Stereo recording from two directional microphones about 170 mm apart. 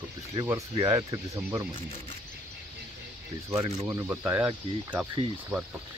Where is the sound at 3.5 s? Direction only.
20° right (ahead or behind).